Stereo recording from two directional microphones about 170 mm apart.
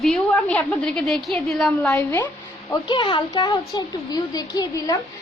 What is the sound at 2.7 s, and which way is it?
A woman's voice, 30° left (ahead or behind).